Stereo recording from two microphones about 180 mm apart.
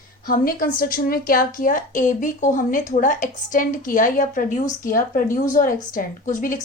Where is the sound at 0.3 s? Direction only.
50° left (ahead or behind).